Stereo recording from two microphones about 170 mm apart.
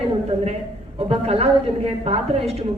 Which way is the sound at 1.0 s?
35° right (ahead or behind).